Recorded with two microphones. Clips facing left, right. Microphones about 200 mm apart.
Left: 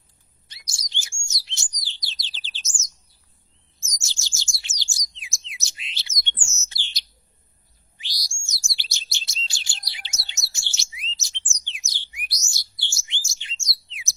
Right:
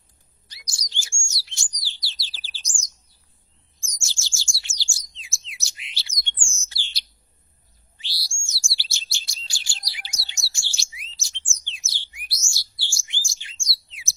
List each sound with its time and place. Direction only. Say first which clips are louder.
0.4 s chirp: right 1 dB; 25° left (ahead or behind)
1.8 s bird: even; 20° left (ahead or behind)
3.8 s chirp: left 1 dB; 20° left (ahead or behind)